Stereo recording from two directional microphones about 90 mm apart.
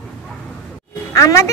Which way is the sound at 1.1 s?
35° left (ahead or behind).